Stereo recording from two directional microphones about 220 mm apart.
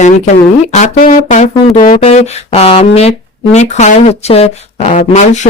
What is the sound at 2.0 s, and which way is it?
Speech, 30° left (ahead or behind).